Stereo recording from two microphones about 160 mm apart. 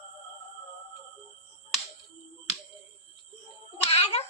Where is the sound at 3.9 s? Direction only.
40° left (ahead or behind).